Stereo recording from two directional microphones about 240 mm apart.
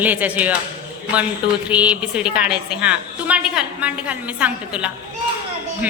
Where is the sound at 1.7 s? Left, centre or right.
Centre.